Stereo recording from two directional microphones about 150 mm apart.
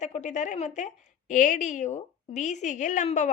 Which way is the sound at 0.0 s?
50° left (ahead or behind).